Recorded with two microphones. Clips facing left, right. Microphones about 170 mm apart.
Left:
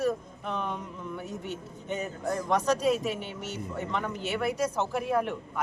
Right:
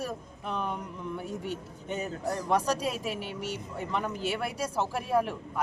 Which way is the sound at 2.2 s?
35° right (ahead or behind).